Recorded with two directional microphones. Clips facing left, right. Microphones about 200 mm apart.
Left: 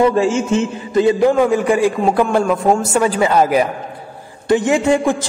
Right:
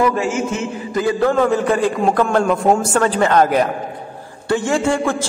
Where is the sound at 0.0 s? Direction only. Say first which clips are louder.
Left 4 dB; 30° left (ahead or behind).